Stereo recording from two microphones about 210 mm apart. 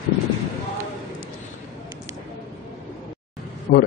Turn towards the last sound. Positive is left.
turn(degrees=50)  # may be behind; listen again after turning